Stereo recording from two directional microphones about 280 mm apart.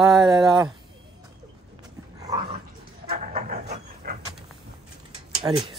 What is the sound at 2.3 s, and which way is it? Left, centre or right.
Dog, centre.